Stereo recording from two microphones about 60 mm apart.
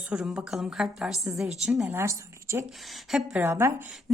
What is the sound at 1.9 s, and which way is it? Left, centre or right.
A woman's voice, right.